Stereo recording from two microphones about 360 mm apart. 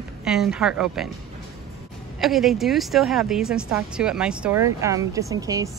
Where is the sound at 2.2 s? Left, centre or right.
Centre.